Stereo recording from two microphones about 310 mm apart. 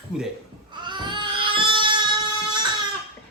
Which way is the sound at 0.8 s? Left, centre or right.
Centre.